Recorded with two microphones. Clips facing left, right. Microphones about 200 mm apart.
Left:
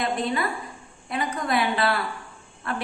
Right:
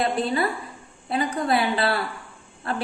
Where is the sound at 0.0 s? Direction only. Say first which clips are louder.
Right 3 dB; 30° right (ahead or behind).